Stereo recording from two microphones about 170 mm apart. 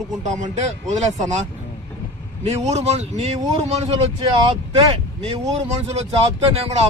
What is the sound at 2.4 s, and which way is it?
Speech, 40° right (ahead or behind).